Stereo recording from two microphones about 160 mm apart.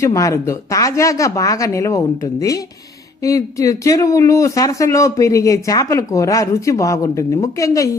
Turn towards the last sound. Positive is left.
turn(degrees=20)  # may be behind; listen again after turning